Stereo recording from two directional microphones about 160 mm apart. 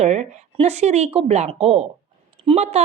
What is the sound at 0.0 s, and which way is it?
A woman's voice, 45° right (ahead or behind).